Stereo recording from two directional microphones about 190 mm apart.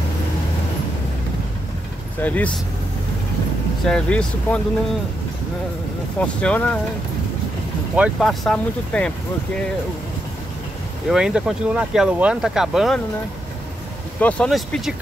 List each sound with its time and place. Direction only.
2.2 s speech: 10° left (ahead or behind)
3.8 s speech: 5° left (ahead or behind)
6.2 s speech: 5° left (ahead or behind)
7.9 s speech: 5° right (ahead or behind)
11.1 s speech: 5° right (ahead or behind)
14.2 s speech: 5° left (ahead or behind)